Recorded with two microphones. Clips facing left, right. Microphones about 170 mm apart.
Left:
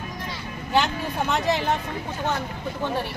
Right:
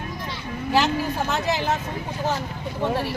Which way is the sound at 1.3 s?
Centre (ahead or behind).